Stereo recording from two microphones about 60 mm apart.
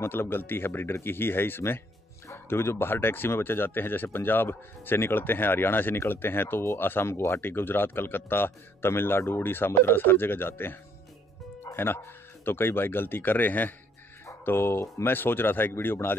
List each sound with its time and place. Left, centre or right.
0.0 s speech: left
11.6 s music: left
12.4 s speech: left